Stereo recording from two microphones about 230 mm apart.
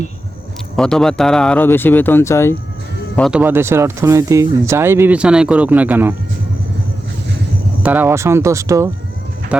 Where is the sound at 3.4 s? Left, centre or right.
Centre.